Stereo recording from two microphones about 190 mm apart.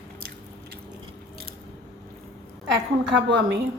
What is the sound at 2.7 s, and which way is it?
Speech, 75° right (ahead or behind).